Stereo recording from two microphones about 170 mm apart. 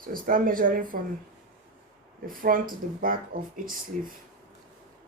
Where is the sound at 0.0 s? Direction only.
55° right (ahead or behind).